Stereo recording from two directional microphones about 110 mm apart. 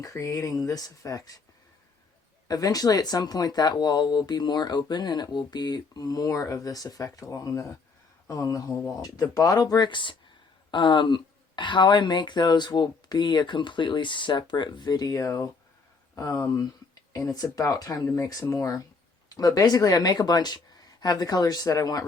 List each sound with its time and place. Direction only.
0.0 s speech: 30° left (ahead or behind)
2.5 s speech: 35° left (ahead or behind)